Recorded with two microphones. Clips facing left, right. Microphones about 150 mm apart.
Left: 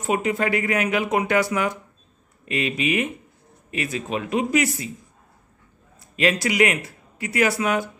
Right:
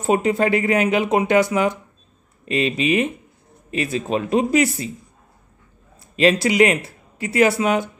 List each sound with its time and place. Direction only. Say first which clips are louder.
0.0 s speech: right 5 dB; 30° right (ahead or behind)
5.9 s a sound: right 5 dB; 30° right (ahead or behind)
6.4 s speech: right 4 dB; 30° right (ahead or behind)